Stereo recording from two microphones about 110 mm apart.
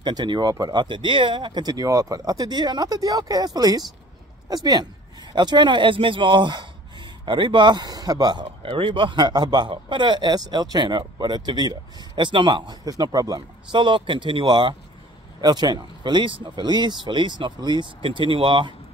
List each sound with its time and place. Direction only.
0.0 s speech: 40° right (ahead or behind)
5.3 s speech: 45° right (ahead or behind)